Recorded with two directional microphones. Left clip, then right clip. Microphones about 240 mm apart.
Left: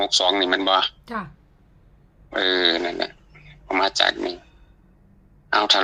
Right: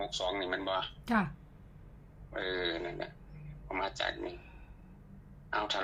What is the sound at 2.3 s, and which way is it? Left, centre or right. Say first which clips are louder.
Speech: left 15 dB; left.